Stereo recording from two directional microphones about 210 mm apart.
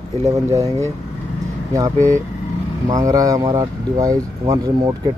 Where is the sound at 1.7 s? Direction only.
15° right (ahead or behind).